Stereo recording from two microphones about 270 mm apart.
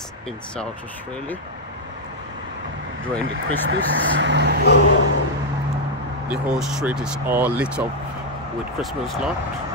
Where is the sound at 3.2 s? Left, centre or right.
Right.